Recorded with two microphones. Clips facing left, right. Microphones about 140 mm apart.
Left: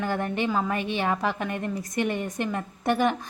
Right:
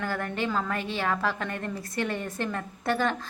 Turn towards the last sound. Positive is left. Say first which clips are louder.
# left 3 dB
turn(degrees=15)  # may be behind; listen again after turning